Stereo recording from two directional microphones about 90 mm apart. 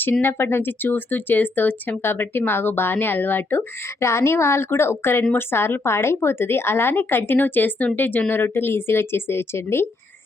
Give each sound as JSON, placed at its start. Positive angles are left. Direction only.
{"t": 0.0, "sound": "speech", "side_deg": 25}